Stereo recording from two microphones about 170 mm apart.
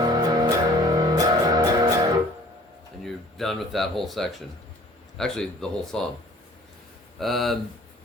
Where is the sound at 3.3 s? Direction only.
Centre (ahead or behind).